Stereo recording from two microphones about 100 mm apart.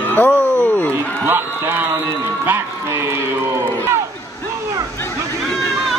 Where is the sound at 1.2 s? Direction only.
20° right (ahead or behind).